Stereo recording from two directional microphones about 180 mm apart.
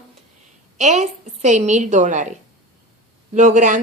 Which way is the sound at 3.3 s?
45° right (ahead or behind).